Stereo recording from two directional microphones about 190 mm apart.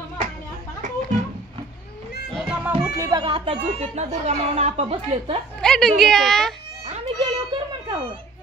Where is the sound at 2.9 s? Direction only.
25° right (ahead or behind).